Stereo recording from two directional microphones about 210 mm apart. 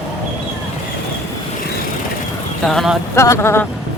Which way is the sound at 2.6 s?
Centre (ahead or behind).